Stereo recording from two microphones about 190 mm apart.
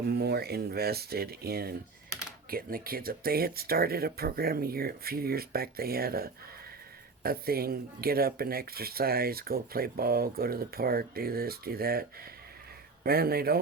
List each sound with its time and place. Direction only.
0.1 s speech: 55° right (ahead or behind)